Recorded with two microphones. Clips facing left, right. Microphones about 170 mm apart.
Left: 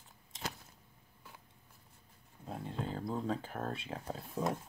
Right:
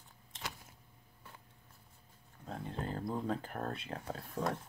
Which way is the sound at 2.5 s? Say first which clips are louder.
Even; centre (ahead or behind).